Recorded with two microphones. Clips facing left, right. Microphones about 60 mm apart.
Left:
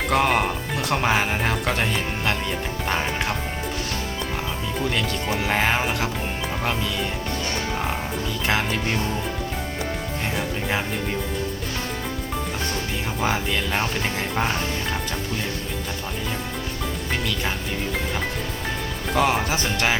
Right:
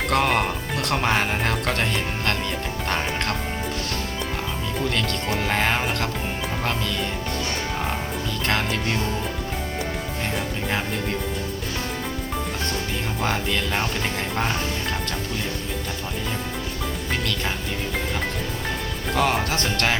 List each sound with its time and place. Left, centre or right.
0.1 s speech: centre
4.8 s speech: centre
8.4 s speech: centre
13.2 s speech: centre
19.1 s speech: centre